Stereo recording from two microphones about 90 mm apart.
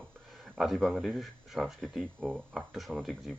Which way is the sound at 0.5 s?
5° right (ahead or behind).